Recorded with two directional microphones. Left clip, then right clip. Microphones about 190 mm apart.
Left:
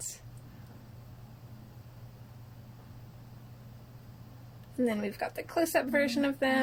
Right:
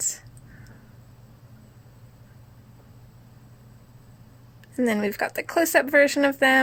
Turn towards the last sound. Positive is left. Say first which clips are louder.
# right 10 dB
turn(degrees=-45)  # may be behind; listen again after turning